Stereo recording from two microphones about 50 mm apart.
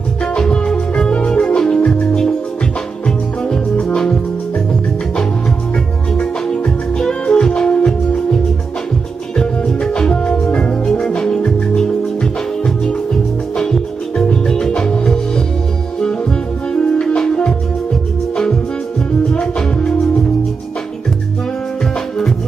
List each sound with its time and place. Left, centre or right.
0.4 s music: centre
6.1 s music: centre
9.4 s music: centre
13.6 s music: centre
16.7 s music: centre